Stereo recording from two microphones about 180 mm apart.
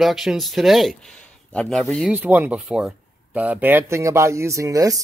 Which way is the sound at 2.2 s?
10° right (ahead or behind).